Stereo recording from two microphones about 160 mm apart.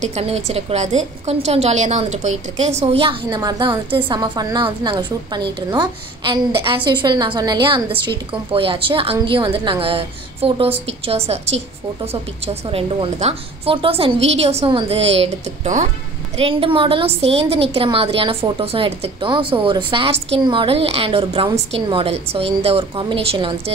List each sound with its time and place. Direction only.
0.0 s a woman's voice: 40° right (ahead or behind)
12.6 s a woman's voice: 35° right (ahead or behind)
16.3 s a woman's voice: 35° right (ahead or behind)